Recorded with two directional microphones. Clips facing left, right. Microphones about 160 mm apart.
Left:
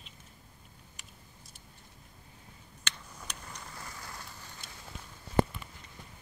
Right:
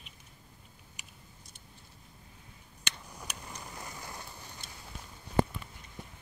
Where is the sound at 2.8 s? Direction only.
15° right (ahead or behind).